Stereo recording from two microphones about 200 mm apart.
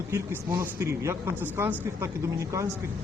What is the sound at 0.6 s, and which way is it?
Speech, 10° right (ahead or behind).